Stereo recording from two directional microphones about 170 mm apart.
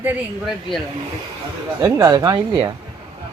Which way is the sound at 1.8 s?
20° right (ahead or behind).